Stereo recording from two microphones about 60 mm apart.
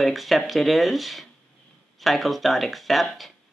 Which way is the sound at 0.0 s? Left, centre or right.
Centre.